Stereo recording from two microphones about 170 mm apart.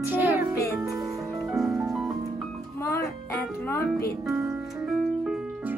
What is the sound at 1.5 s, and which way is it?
Music, centre (ahead or behind).